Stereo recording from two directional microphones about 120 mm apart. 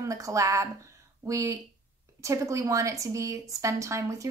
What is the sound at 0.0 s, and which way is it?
A woman's voice, 25° right (ahead or behind).